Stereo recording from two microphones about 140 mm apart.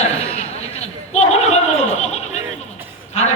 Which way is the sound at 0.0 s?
50° left (ahead or behind).